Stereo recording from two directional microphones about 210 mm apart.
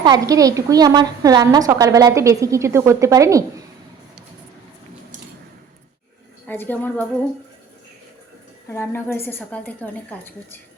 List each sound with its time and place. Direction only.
0.0 s a woman's voice: 20° right (ahead or behind)
6.5 s a woman's voice: 10° left (ahead or behind)
8.7 s a woman's voice: 10° left (ahead or behind)